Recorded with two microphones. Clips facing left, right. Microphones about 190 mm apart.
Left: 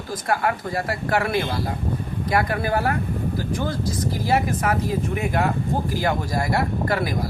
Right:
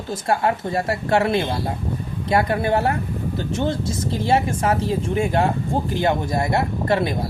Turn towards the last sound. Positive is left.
turn(degrees=-25)  # may be behind; listen again after turning